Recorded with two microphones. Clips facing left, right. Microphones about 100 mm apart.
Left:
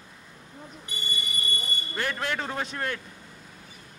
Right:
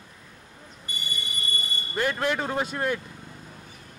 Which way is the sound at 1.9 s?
15° right (ahead or behind).